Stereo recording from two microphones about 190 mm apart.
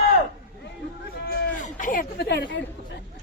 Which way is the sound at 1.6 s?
45° left (ahead or behind).